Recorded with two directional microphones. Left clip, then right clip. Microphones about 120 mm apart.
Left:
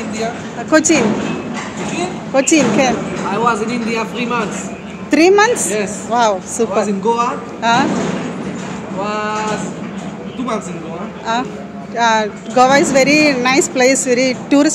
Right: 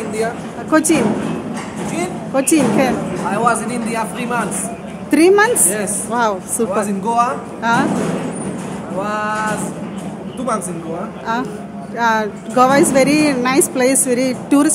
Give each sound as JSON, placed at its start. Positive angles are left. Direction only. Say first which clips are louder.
{"t": 0.7, "sound": "speech", "louder": "left 2 dB", "side_deg": -15}
{"t": 2.3, "sound": "speech", "louder": "left 2 dB", "side_deg": -15}
{"t": 3.4, "sound": "speech", "louder": "left 2 dB", "side_deg": -45}
{"t": 5.1, "sound": "a woman's voice", "louder": "left 1 dB", "side_deg": -25}
{"t": 7.6, "sound": "a woman's voice", "louder": "left 2 dB", "side_deg": -20}
{"t": 9.0, "sound": "speech", "louder": "left 1 dB", "side_deg": -30}
{"t": 12.0, "sound": "a woman's voice", "louder": "left 2 dB", "side_deg": -25}